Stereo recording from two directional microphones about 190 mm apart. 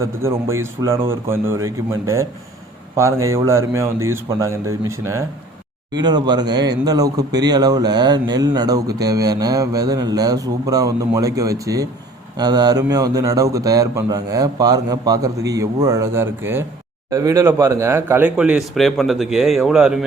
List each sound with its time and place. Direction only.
0.0 s speech: 15° right (ahead or behind)